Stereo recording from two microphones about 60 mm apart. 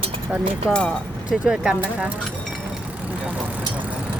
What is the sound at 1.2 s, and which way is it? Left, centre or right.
Speech, centre.